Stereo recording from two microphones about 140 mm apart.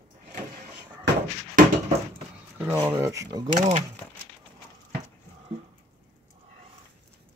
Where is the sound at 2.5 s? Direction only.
15° right (ahead or behind).